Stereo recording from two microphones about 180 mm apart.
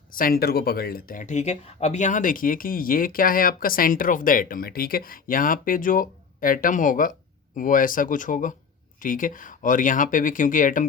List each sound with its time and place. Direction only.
0.1 s speech: 55° left (ahead or behind)